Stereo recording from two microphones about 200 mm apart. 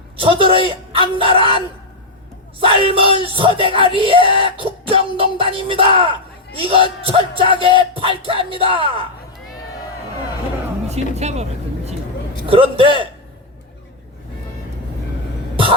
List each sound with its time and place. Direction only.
0.2 s a man's voice: 25° right (ahead or behind)
1.2 s music: 25° right (ahead or behind)
11.1 s speech: 35° right (ahead or behind)
12.5 s music: 25° right (ahead or behind)